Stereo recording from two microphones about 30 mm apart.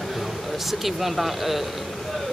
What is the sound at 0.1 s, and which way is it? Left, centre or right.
Speech, centre.